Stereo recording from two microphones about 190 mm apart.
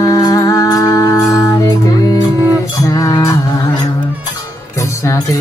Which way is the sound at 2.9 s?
20° left (ahead or behind).